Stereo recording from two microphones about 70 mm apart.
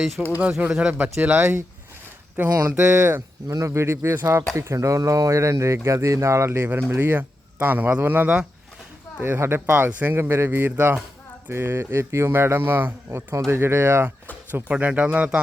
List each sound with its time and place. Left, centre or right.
0.2 s speech: centre
0.7 s speech: centre
2.6 s speech: right
3.5 s speech: right
6.7 s speech: right
14.7 s speech: centre